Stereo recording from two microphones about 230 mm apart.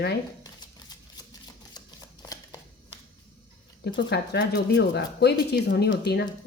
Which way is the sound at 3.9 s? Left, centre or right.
Left.